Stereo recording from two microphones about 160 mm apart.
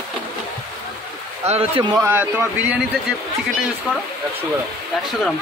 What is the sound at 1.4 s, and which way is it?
Speech, 40° right (ahead or behind).